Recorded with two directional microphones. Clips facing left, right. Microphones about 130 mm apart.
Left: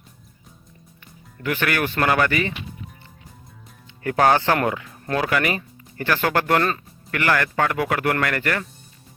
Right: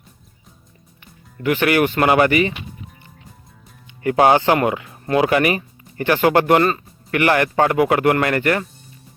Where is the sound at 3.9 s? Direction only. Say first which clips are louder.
Right 4 dB; 15° right (ahead or behind).